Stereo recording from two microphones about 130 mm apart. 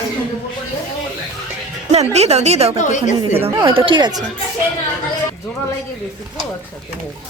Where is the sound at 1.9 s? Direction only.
55° right (ahead or behind).